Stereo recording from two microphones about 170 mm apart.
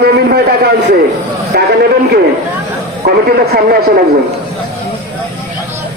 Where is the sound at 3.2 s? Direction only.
65° right (ahead or behind).